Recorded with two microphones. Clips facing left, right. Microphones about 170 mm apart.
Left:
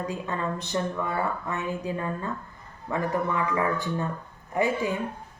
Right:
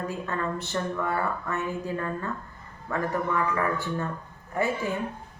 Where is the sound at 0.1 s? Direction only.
15° left (ahead or behind).